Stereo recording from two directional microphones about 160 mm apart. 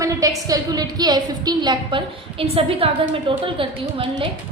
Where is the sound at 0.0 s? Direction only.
20° right (ahead or behind).